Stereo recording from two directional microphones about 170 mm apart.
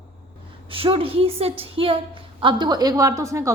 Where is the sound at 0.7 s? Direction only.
30° right (ahead or behind).